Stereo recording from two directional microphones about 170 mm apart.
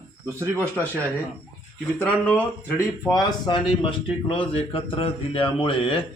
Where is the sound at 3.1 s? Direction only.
25° left (ahead or behind).